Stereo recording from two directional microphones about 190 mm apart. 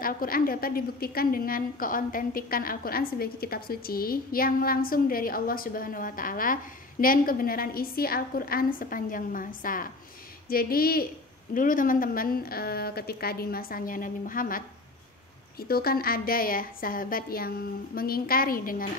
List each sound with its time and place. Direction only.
0.0 s a woman's voice: 50° left (ahead or behind)